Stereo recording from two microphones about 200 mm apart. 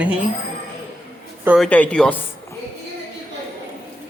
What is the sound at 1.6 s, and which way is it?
Speech, 10° left (ahead or behind).